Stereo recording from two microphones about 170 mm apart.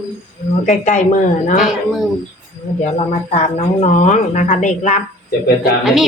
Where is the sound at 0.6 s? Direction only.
45° left (ahead or behind).